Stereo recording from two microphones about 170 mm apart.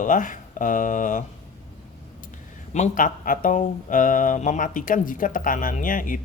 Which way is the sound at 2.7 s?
50° left (ahead or behind).